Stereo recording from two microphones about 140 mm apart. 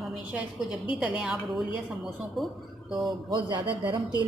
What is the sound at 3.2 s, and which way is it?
Speech, 35° right (ahead or behind).